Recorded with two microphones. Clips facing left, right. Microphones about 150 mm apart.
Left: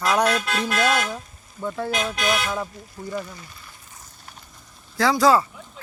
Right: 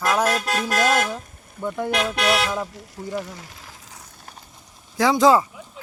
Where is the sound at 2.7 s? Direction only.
90° right.